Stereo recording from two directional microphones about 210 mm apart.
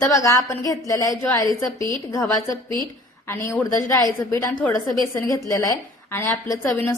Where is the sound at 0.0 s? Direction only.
15° left (ahead or behind).